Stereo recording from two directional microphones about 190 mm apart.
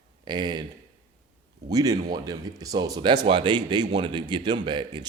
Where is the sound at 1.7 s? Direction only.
20° right (ahead or behind).